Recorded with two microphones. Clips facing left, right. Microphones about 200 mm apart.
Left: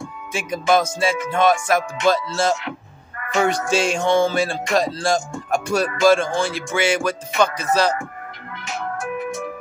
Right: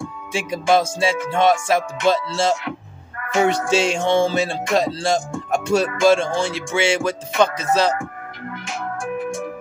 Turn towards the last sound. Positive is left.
turn(degrees=-25)  # may be behind; listen again after turning